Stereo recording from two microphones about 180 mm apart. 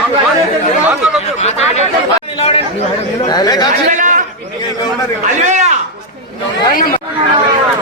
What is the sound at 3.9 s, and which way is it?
Speech, 45° right (ahead or behind).